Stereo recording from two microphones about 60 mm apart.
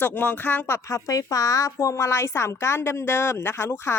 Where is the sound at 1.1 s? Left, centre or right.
Left.